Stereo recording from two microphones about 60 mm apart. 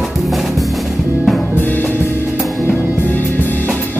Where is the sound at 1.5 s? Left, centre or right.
Left.